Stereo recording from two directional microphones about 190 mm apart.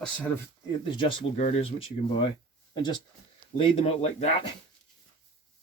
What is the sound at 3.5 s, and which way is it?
Speech, 30° left (ahead or behind).